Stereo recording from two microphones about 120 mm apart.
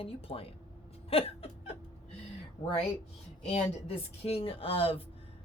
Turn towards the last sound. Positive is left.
turn(degrees=50)  # may be behind; listen again after turning